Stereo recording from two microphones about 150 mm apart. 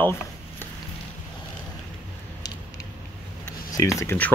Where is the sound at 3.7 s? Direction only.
20° left (ahead or behind).